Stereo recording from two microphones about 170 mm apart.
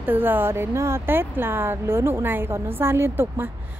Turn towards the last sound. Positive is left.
turn(degrees=-15)  # may be behind; listen again after turning